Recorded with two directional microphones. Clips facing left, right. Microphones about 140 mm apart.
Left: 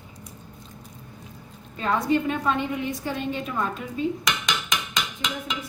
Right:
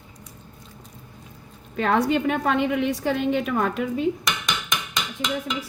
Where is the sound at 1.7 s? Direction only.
75° right (ahead or behind).